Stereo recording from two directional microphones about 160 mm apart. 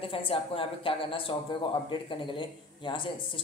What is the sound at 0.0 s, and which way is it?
A woman's voice, 35° left (ahead or behind).